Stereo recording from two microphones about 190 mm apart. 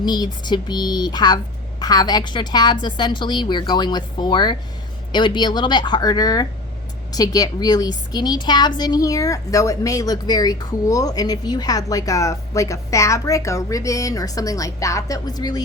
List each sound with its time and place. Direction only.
0.0 s a woman's voice: 20° left (ahead or behind)